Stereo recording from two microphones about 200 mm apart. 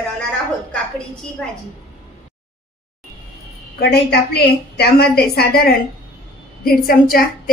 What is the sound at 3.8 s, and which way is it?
A woman's voice, 55° left (ahead or behind).